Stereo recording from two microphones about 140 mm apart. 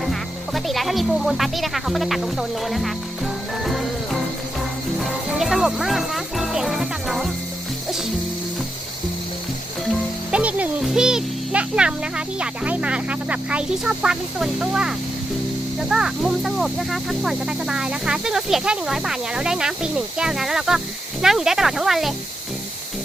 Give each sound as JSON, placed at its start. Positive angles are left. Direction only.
{"t": 0.0, "sound": "speech", "side_deg": 0}
{"t": 3.6, "sound": "music", "side_deg": 0}
{"t": 5.4, "sound": "speech", "side_deg": 0}
{"t": 10.3, "sound": "a child's voice", "side_deg": -10}